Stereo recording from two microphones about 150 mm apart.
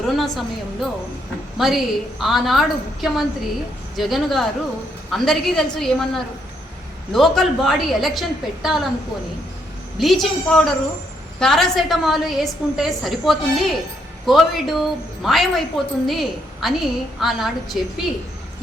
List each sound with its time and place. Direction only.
0.0 s a woman's voice: centre (ahead or behind)
10.0 s a woman's voice: centre (ahead or behind)